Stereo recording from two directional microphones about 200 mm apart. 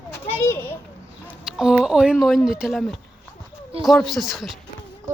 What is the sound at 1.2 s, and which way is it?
Speech, 5° right (ahead or behind).